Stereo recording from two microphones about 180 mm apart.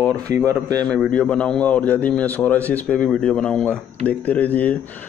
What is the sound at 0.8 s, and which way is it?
Speech, 5° left (ahead or behind).